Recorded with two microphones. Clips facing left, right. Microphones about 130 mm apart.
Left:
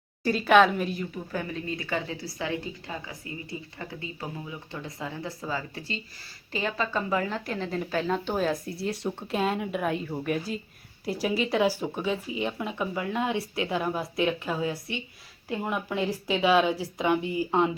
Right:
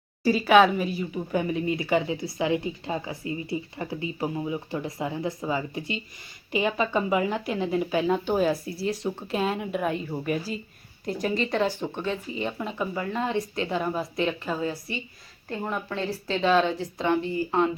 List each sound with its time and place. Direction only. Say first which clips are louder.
0.3 s a woman's voice: right 2 dB; centre (ahead or behind)
1.3 s a woman's voice: right 9 dB; 20° right (ahead or behind); by 17.7 s 15° left (ahead or behind)